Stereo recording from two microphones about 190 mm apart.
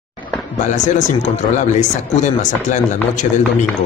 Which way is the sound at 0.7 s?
40° left (ahead or behind).